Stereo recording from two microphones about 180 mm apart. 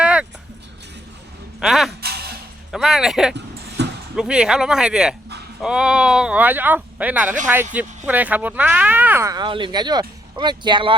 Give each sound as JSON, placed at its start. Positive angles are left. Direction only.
{"t": 0.0, "sound": "music", "side_deg": -5}
{"t": 1.5, "sound": "speech", "side_deg": 0}
{"t": 2.0, "sound": "music", "side_deg": -60}
{"t": 2.7, "sound": "speech", "side_deg": 0}
{"t": 3.8, "sound": "a sound", "side_deg": -70}
{"t": 4.1, "sound": "speech", "side_deg": -5}